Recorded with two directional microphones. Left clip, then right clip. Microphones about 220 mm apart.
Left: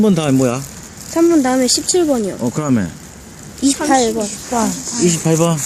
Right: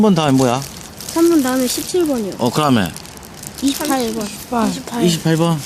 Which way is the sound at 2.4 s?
10° right (ahead or behind).